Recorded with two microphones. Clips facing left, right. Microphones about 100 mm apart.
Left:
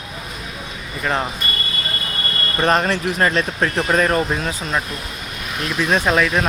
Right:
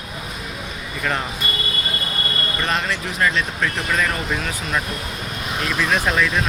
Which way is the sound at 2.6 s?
40° left (ahead or behind).